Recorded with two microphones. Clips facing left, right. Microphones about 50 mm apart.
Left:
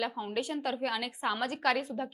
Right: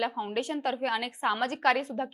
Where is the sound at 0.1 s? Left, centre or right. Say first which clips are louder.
Right 4 dB; centre.